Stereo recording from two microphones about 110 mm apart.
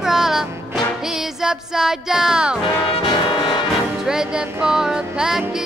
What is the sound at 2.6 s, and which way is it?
Brass instrument, 50° left (ahead or behind).